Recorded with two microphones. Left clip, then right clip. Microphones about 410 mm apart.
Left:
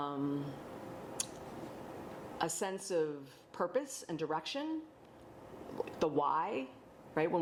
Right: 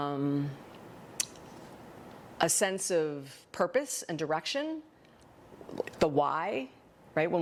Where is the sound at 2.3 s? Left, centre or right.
Right.